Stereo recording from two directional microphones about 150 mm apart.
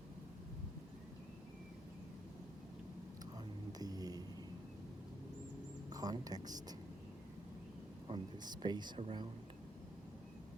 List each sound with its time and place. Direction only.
3.3 s a sound: 25° right (ahead or behind)
5.9 s speech: 25° right (ahead or behind)
8.0 s speech: 30° right (ahead or behind)
9.0 s speech: 40° right (ahead or behind)